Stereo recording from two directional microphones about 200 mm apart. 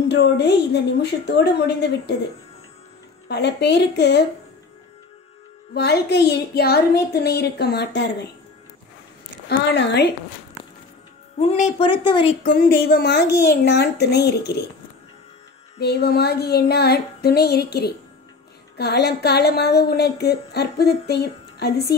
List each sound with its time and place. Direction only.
0.1 s speech: 60° left (ahead or behind)
3.3 s speech: 55° left (ahead or behind)
5.8 s speech: 55° left (ahead or behind)
9.5 s speech: 55° left (ahead or behind)
11.3 s a woman's voice: 35° left (ahead or behind)
12.4 s a sound: 50° left (ahead or behind)
13.4 s speech: 55° left (ahead or behind)
15.8 s a sound: 55° left (ahead or behind)
18.8 s speech: 55° left (ahead or behind)